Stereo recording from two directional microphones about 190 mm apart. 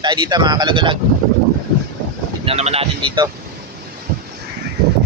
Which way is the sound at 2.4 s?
35° right (ahead or behind).